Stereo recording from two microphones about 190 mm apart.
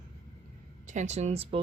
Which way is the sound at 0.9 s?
40° right (ahead or behind).